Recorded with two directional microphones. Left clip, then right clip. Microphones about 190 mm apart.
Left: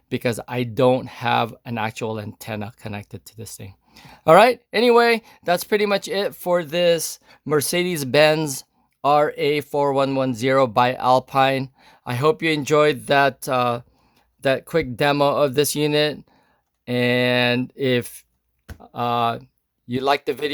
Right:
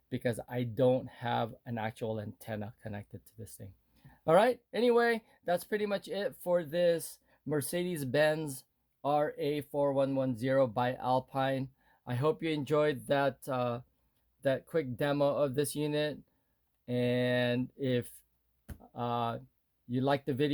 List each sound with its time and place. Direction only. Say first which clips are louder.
0.1 s speech: left 11 dB; 35° left (ahead or behind)